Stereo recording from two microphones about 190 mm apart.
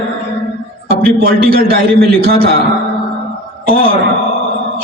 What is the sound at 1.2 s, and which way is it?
A man's voice, 50° right (ahead or behind).